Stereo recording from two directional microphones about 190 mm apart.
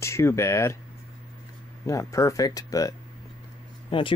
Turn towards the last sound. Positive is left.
turn(degrees=25)  # may be behind; listen again after turning